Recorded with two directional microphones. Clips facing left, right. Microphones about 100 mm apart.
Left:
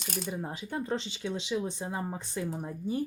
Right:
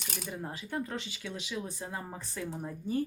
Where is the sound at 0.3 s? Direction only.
20° left (ahead or behind).